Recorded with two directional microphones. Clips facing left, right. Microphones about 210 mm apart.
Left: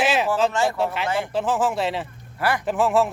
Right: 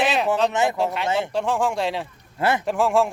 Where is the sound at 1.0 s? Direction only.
25° right (ahead or behind).